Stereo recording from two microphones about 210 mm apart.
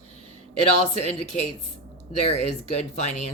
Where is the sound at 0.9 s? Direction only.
30° left (ahead or behind).